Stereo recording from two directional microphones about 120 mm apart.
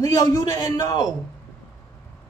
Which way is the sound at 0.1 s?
30° left (ahead or behind).